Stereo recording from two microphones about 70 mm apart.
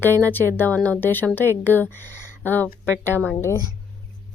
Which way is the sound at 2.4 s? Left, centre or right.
Left.